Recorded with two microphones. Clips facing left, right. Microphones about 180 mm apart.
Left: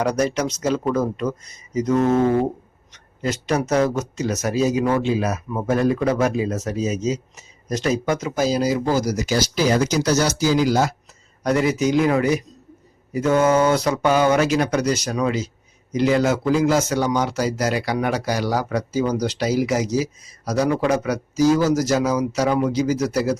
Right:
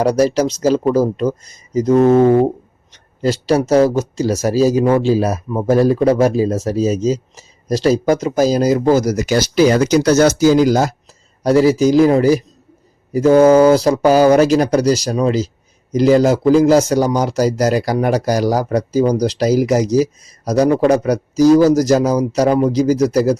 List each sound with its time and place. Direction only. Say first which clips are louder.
0.0 s a man's voice: right 7 dB; 35° right (ahead or behind)
2.1 s a sound: right 7 dB; 55° right (ahead or behind)
2.9 s a man's voice: right 7 dB; 30° right (ahead or behind); by 9.2 s 45° right (ahead or behind)
9.2 s speech: right 7 dB; 65° right (ahead or behind); by 10.9 s 45° right (ahead or behind)
11.4 s a man's voice: right 7 dB; 30° right (ahead or behind)